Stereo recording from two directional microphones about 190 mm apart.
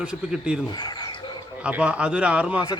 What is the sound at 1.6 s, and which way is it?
A man's voice, 5° right (ahead or behind).